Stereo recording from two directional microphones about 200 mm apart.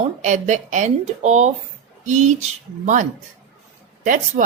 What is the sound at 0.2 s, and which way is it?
Speech, 40° right (ahead or behind).